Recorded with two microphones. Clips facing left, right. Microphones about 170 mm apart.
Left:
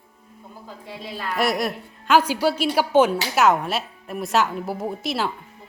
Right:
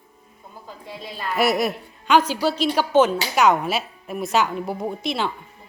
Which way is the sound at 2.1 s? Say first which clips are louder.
Even; 10° left (ahead or behind).